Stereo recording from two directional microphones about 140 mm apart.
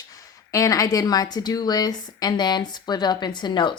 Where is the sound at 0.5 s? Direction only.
25° left (ahead or behind).